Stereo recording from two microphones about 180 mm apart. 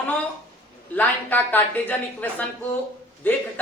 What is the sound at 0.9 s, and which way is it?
Speech, 10° left (ahead or behind).